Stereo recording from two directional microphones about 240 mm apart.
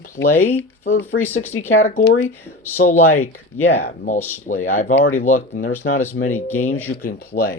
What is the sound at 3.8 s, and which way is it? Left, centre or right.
Speech, left.